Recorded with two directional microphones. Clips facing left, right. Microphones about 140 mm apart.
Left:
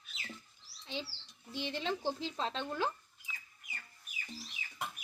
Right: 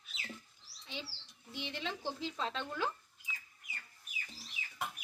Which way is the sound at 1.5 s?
35° left (ahead or behind).